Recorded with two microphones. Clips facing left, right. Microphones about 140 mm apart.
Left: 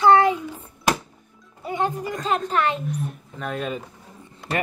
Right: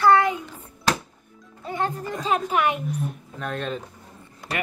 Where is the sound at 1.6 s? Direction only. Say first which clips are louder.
Left 2 dB; 15° left (ahead or behind).